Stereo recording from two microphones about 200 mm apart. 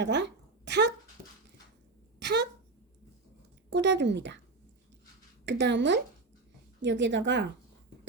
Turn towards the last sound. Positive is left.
turn(degrees=-65)  # may be behind; listen again after turning